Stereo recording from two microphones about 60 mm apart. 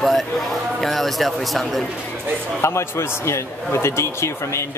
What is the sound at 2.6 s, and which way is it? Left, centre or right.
A man's voice, left.